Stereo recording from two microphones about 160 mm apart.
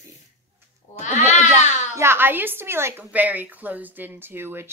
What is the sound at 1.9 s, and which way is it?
Speech, 15° right (ahead or behind).